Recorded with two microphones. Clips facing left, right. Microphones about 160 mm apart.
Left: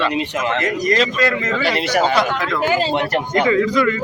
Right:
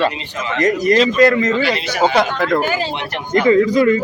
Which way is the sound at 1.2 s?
50° right (ahead or behind).